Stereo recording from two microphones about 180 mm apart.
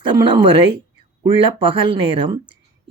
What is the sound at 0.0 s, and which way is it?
Speech, 25° right (ahead or behind).